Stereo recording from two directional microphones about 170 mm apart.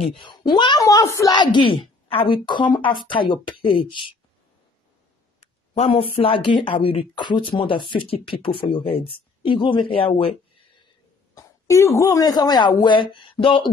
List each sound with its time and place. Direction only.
0.5 s a woman's voice: 25° left (ahead or behind)
5.4 s speech: 35° left (ahead or behind)
11.3 s speech: 20° left (ahead or behind)